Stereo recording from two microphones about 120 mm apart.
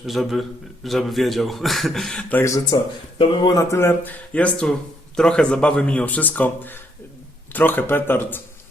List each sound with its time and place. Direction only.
0.0 s speech: centre (ahead or behind)
2.6 s speech: 40° left (ahead or behind)
3.6 s speech: 20° left (ahead or behind)